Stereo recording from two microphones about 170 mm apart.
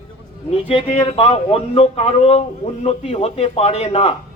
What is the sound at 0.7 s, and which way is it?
A man's voice, 30° left (ahead or behind).